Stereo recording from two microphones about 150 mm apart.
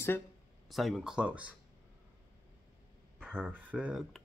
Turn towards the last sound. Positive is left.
turn(degrees=-5)  # may be behind; listen again after turning